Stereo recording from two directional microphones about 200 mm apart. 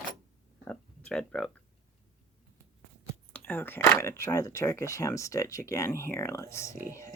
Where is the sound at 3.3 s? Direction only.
10° left (ahead or behind).